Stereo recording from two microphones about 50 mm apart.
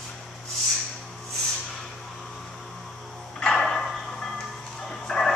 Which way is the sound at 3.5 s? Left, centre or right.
Centre.